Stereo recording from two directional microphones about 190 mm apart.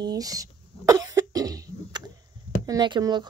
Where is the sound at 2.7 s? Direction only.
20° right (ahead or behind).